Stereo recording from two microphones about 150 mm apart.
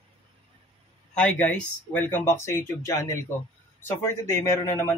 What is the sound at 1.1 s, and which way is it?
Speech, 10° left (ahead or behind).